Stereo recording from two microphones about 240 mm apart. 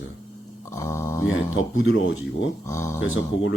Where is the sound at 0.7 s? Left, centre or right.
Centre.